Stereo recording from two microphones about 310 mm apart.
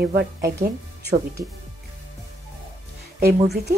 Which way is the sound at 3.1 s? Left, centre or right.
Right.